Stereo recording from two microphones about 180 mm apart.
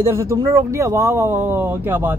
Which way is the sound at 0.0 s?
15° right (ahead or behind).